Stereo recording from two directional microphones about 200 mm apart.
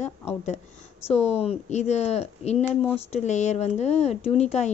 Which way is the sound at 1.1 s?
30° left (ahead or behind).